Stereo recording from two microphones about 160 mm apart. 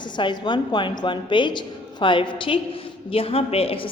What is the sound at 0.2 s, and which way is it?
A woman's voice, 30° left (ahead or behind).